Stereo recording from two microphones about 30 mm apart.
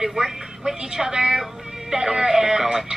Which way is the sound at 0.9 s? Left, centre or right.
Centre.